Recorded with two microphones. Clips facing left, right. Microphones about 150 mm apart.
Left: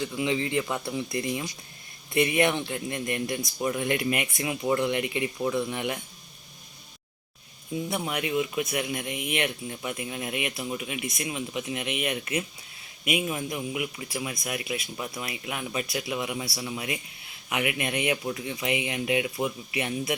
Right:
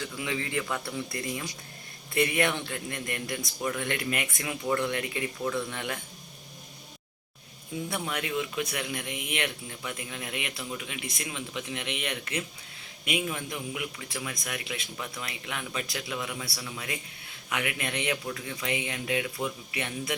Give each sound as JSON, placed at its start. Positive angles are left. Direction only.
{"t": 0.0, "sound": "speech", "side_deg": 20}
{"t": 7.9, "sound": "speech", "side_deg": 20}